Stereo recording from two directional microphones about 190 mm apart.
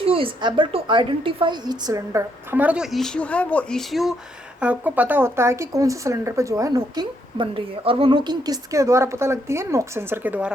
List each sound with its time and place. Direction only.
0.0 s speech: 30° right (ahead or behind); by 10.5 s 10° right (ahead or behind)